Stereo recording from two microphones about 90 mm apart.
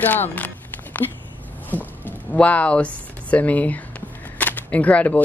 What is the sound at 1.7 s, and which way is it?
Speech, 20° left (ahead or behind).